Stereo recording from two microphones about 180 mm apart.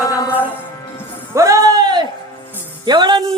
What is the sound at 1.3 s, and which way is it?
Music, 15° right (ahead or behind).